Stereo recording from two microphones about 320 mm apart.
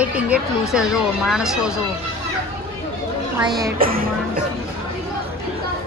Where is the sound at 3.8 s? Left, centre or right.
Right.